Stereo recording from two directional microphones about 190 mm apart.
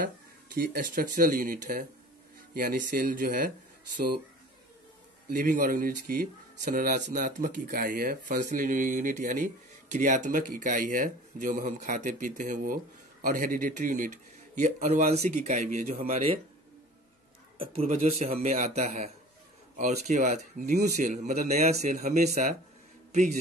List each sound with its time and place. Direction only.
0.6 s speech: 45° right (ahead or behind)
5.3 s speech: 45° right (ahead or behind)
17.6 s speech: 30° right (ahead or behind); by 20.9 s 50° right (ahead or behind)
20.9 s speech: 40° right (ahead or behind)